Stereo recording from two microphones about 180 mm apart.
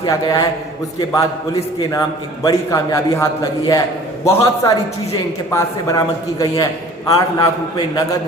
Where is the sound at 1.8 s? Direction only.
20° left (ahead or behind).